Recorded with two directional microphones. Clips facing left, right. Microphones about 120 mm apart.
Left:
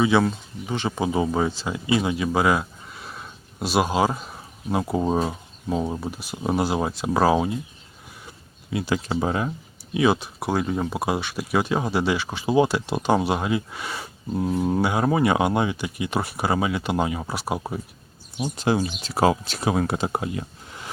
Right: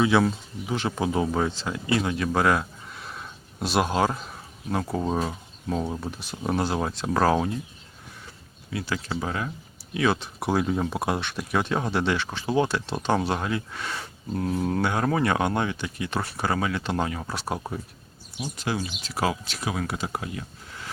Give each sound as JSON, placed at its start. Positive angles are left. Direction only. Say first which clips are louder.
{"t": 0.0, "sound": "speech", "louder": "left 1 dB", "side_deg": 0}
{"t": 8.7, "sound": "speech", "louder": "left 5 dB", "side_deg": 20}
{"t": 10.4, "sound": "speech", "louder": "even", "side_deg": 0}
{"t": 18.5, "sound": "speech", "louder": "left 7 dB", "side_deg": 30}